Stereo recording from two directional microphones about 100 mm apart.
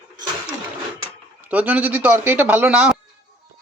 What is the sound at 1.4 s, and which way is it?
A man's voice, 15° right (ahead or behind).